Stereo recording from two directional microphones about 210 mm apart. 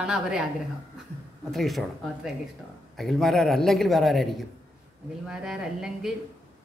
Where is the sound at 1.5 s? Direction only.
Centre (ahead or behind).